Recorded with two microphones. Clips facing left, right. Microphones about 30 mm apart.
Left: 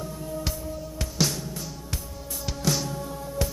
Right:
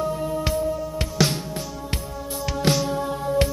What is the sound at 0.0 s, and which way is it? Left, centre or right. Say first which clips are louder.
Music: right 8 dB; right.